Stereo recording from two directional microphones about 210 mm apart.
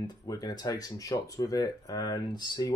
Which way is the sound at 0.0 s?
20° left (ahead or behind).